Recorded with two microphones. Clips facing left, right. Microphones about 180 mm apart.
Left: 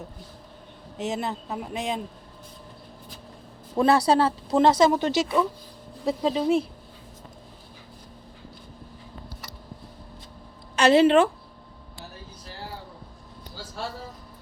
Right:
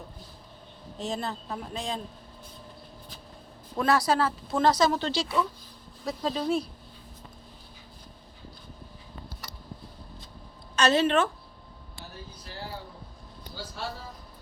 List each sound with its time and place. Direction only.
0.9 s speech: 20° left (ahead or behind)
3.8 s speech: 30° left (ahead or behind)
10.8 s a woman's voice: 30° left (ahead or behind)